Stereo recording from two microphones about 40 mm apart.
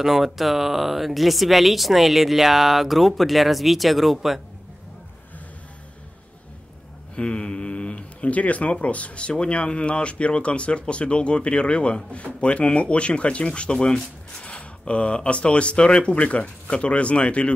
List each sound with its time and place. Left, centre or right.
0.0 s speech: centre
7.2 s speech: left